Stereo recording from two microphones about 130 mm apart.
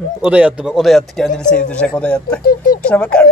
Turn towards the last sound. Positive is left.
turn(degrees=5)  # may be behind; listen again after turning